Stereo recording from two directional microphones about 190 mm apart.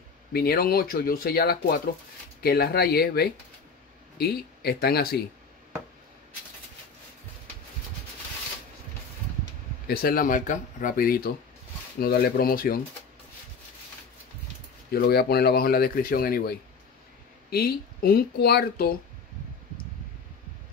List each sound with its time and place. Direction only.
0.3 s speech: 55° left (ahead or behind)
9.8 s speech: 50° left (ahead or behind)
14.9 s speech: 55° left (ahead or behind)